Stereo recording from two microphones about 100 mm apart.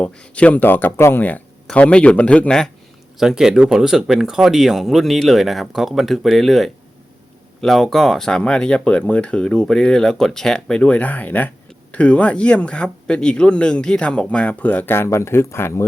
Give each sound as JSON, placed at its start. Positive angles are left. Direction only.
{"t": 0.0, "sound": "speech", "side_deg": 15}
{"t": 3.2, "sound": "speech", "side_deg": -5}